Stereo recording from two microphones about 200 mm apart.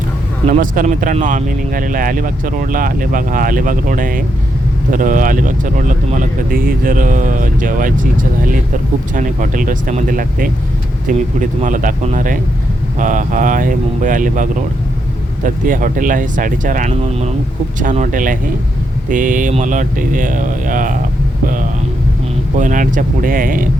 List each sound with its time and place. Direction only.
0.5 s speech: 40° right (ahead or behind)
9.1 s speech: 40° right (ahead or behind)
15.4 s speech: 40° right (ahead or behind)
22.5 s speech: 40° right (ahead or behind)